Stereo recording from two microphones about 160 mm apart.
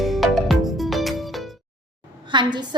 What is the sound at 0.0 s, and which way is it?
Music, centre (ahead or behind).